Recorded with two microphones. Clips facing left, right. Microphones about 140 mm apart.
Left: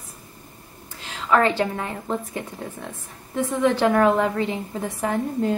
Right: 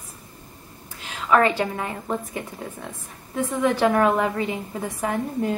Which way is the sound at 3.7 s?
5° right (ahead or behind).